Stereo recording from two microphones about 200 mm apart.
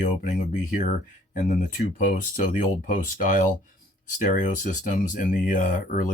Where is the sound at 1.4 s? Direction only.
40° left (ahead or behind).